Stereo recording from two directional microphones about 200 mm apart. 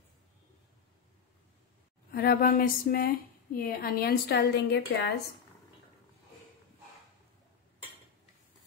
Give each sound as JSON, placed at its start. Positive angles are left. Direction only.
{"t": 2.0, "sound": "a woman's voice", "side_deg": 50}